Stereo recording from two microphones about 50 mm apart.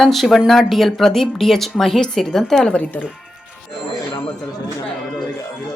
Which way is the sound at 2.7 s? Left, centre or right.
Left.